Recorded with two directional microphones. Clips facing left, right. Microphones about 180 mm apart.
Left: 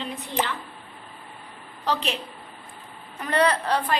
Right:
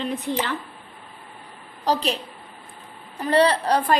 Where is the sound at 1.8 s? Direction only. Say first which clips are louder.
Right 4 dB; 40° right (ahead or behind).